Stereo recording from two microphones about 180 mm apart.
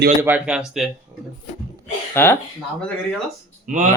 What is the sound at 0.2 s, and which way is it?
Speech, 10° right (ahead or behind).